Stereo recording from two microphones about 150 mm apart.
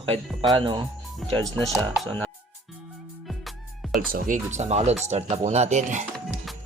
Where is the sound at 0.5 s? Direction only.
30° right (ahead or behind).